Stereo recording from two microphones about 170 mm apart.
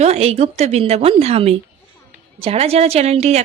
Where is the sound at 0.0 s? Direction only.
40° right (ahead or behind).